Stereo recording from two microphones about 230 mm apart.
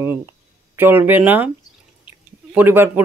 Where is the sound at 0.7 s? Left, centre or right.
Centre.